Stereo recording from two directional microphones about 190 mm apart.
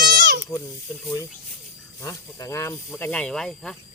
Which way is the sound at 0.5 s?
15° left (ahead or behind).